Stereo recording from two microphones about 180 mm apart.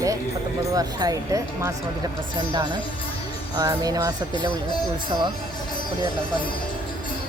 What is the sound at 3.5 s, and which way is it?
Speech, 20° right (ahead or behind).